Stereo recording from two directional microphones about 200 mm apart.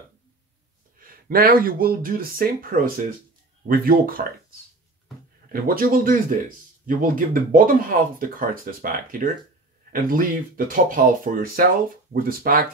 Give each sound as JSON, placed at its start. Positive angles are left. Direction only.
{"t": 0.9, "sound": "speech", "side_deg": -45}
{"t": 5.5, "sound": "speech", "side_deg": -45}